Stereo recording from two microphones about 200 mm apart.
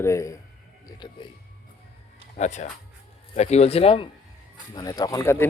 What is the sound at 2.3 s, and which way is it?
A man's voice, 35° left (ahead or behind).